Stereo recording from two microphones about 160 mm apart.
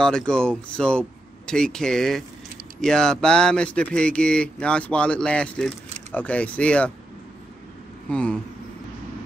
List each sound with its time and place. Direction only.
0.0 s speech: 5° left (ahead or behind)
8.1 s speech: 5° left (ahead or behind)